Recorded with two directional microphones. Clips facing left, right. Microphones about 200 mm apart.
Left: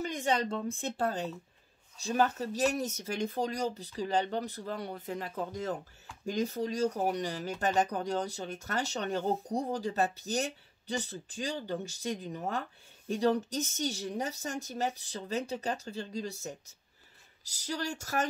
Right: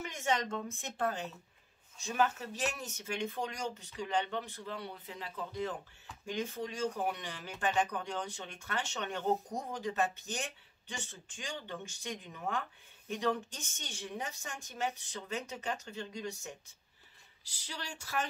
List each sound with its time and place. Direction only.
0.0 s speech: 35° left (ahead or behind)